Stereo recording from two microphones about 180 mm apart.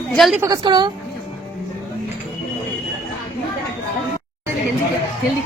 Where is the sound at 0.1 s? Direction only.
Centre (ahead or behind).